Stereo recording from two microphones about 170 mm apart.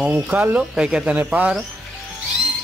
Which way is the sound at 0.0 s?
10° right (ahead or behind).